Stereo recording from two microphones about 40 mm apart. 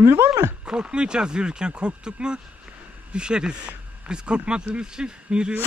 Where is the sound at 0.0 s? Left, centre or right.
Right.